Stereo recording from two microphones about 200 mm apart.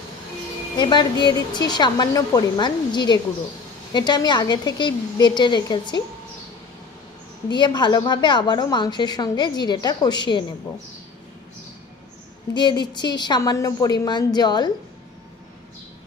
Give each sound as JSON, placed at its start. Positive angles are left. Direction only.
{"t": 0.7, "sound": "a woman's voice", "side_deg": 20}
{"t": 7.4, "sound": "a woman's voice", "side_deg": 20}
{"t": 12.5, "sound": "a woman's voice", "side_deg": 20}